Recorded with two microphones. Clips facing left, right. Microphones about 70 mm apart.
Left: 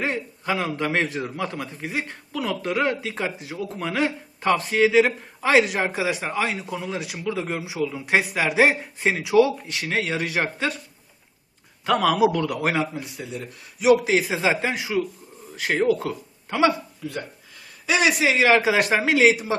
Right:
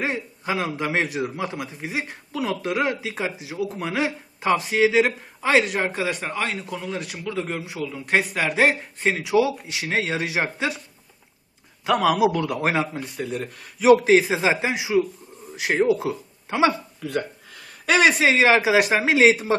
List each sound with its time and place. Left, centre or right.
0.0 s a man's voice: centre
9.6 s speech: centre
11.9 s speech: centre
12.5 s speech: right
12.9 s speech: right
14.2 s speech: right
17.8 s speech: right
18.3 s speech: centre